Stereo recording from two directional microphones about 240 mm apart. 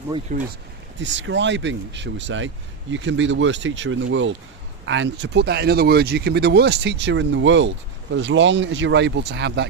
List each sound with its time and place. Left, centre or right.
0.3 s speech: right
0.9 s speech: right